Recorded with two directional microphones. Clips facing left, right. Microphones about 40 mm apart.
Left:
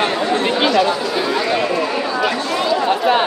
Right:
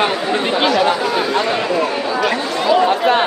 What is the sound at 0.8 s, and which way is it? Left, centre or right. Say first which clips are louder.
Chatter: right 1 dB; right.